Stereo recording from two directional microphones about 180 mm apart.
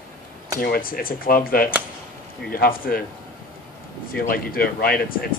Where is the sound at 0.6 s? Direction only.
55° left (ahead or behind).